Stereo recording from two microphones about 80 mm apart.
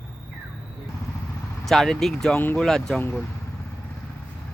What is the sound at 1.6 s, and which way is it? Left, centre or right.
Speech, centre.